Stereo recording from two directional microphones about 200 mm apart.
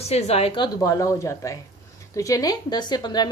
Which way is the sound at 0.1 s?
30° left (ahead or behind).